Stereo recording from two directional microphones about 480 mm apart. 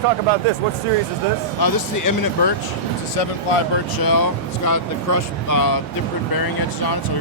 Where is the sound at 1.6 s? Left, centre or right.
Left.